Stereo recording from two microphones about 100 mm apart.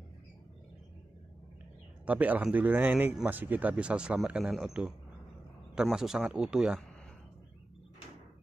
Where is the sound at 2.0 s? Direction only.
15° right (ahead or behind).